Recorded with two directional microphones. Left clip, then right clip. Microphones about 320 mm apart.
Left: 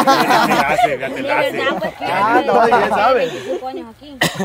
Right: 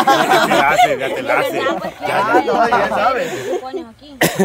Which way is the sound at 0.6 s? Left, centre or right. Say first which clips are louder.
Right 3 dB; centre.